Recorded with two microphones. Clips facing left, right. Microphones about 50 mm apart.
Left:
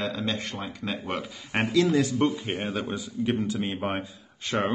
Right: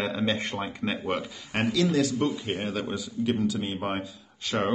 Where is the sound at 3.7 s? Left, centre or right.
Centre.